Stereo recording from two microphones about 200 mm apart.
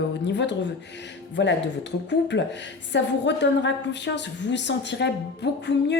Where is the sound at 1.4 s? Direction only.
60° left (ahead or behind).